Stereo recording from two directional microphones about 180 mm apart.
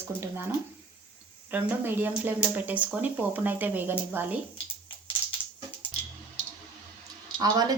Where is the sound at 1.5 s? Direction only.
10° right (ahead or behind).